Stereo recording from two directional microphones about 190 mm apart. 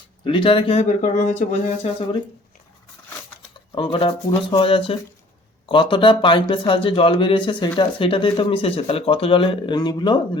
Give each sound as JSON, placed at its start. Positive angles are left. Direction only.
{"t": 0.3, "sound": "speech", "side_deg": 25}
{"t": 3.8, "sound": "speech", "side_deg": 25}